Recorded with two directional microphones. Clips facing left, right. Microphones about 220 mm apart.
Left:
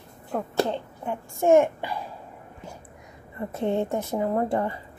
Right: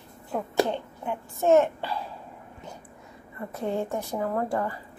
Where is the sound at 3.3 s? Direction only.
25° left (ahead or behind).